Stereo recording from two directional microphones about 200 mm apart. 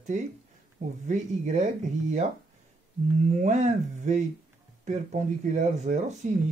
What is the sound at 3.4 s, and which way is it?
Speech, 35° right (ahead or behind).